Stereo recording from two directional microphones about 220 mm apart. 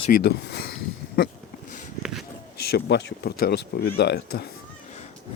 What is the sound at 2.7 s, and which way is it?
Speech, 50° left (ahead or behind).